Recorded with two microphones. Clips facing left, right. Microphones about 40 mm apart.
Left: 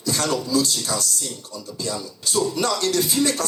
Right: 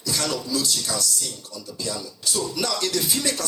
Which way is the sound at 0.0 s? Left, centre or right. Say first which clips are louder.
Left 3 dB; left.